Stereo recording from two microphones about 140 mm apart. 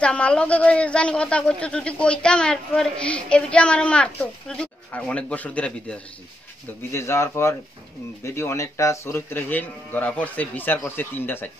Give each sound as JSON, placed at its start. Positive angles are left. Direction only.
{"t": 0.0, "sound": "speech", "side_deg": 10}